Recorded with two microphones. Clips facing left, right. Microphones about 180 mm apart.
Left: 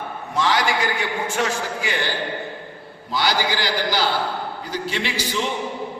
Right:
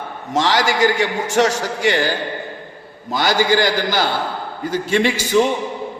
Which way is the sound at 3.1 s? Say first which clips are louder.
Right 6 dB; 50° right (ahead or behind).